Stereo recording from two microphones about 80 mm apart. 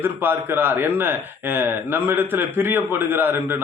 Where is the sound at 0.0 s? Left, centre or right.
Right.